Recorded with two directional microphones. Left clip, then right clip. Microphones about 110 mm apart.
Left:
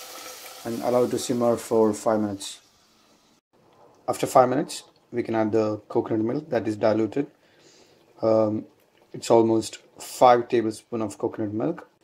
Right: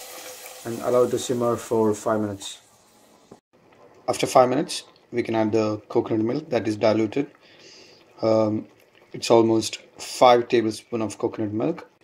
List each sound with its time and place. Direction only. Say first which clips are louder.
0.8 s speech: right 2 dB; 85° left
4.0 s speech: right 1 dB; 10° left (ahead or behind)